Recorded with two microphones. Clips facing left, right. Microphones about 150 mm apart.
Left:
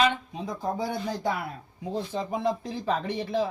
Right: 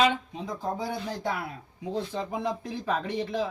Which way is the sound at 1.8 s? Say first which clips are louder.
Even; 15° left (ahead or behind).